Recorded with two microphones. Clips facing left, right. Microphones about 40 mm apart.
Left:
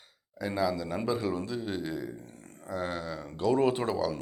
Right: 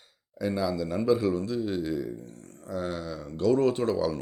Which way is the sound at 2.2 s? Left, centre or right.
Left.